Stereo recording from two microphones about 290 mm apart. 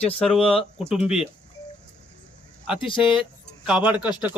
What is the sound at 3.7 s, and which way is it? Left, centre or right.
Speech, centre.